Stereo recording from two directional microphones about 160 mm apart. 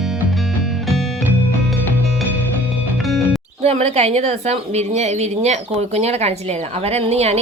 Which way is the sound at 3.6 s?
40° right (ahead or behind).